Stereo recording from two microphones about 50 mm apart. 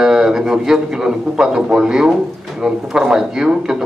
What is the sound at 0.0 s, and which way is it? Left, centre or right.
A man's voice, centre.